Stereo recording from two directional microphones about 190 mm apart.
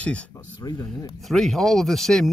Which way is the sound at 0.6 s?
20° left (ahead or behind).